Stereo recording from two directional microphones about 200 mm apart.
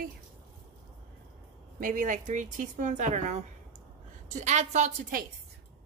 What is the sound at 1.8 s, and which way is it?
Speech, 40° right (ahead or behind).